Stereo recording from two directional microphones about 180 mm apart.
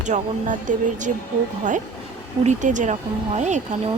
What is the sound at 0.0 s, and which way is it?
Speech, 40° right (ahead or behind).